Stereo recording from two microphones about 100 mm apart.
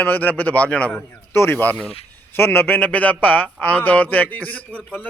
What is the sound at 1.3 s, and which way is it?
A man's voice, 25° left (ahead or behind).